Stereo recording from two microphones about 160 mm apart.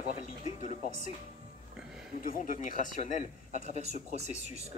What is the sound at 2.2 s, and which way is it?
Speech, 60° left (ahead or behind).